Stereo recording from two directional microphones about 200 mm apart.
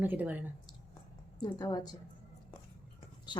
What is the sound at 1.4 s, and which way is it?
Speech, 20° left (ahead or behind).